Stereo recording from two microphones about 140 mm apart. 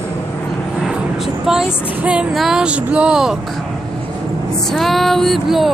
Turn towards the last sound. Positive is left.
turn(degrees=0)  # may be behind; listen again after turning